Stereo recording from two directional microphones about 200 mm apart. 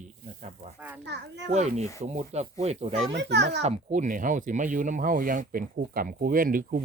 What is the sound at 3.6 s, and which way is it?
Speech, 35° right (ahead or behind).